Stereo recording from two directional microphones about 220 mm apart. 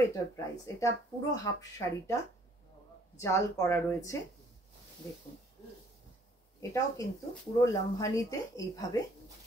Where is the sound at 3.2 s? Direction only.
10° left (ahead or behind).